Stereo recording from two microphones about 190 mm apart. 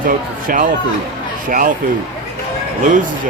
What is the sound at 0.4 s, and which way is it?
Speech, 45° right (ahead or behind).